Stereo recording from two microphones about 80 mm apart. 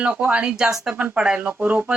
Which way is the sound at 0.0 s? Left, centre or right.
Centre.